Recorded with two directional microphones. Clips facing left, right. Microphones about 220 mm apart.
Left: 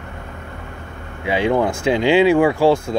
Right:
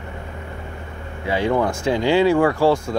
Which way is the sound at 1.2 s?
20° left (ahead or behind).